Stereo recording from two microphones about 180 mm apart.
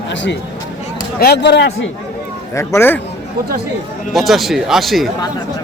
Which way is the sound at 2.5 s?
15° left (ahead or behind).